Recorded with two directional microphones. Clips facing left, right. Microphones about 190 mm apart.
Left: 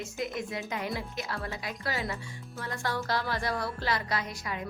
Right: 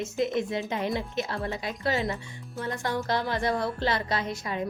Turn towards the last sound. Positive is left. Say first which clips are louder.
# right 4 dB
turn(degrees=-25)  # may be behind; listen again after turning